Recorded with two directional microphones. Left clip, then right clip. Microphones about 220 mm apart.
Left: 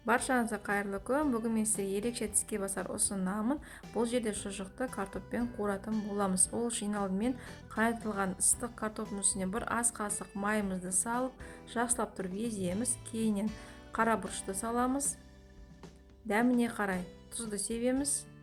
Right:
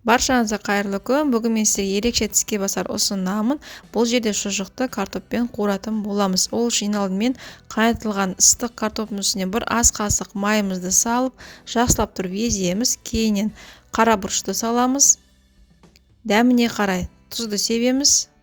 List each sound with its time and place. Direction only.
0.0 s a woman's voice: 45° right (ahead or behind)
16.2 s a woman's voice: 45° right (ahead or behind)